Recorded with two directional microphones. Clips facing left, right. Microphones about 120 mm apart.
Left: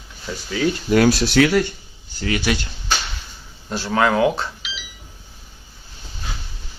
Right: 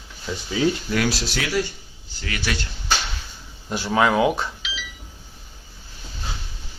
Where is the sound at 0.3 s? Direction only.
15° right (ahead or behind).